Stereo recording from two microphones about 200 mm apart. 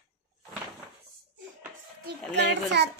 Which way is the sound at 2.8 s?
55° right (ahead or behind).